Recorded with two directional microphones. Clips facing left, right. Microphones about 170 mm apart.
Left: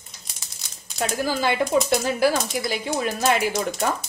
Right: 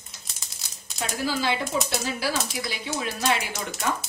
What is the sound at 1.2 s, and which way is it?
Speech, 50° left (ahead or behind).